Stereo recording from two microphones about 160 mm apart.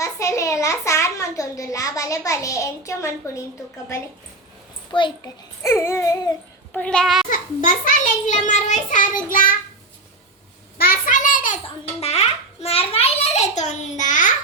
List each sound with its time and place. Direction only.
0.0 s a child's voice: 20° left (ahead or behind)
4.9 s a child's voice: 30° left (ahead or behind)
5.2 s speech: 15° left (ahead or behind)
6.7 s a child's voice: 5° left (ahead or behind)
7.3 s a child's voice: 55° left (ahead or behind)
10.8 s a sound: 65° left (ahead or behind)
11.9 s a child's voice: 40° left (ahead or behind)